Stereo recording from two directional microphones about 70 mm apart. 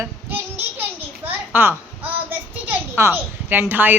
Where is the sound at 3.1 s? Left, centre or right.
Right.